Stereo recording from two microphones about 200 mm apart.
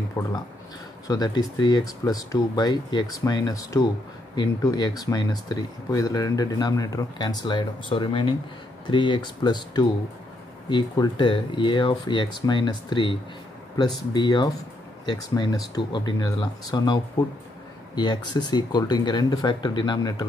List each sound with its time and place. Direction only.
0.2 s speech: 10° left (ahead or behind)